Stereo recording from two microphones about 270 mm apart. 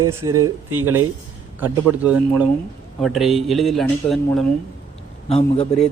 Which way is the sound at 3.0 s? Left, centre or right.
Centre.